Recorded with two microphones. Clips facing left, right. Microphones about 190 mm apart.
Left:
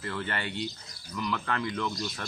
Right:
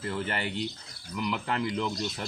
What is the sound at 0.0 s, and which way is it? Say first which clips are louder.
Speech: right 2 dB; 20° right (ahead or behind).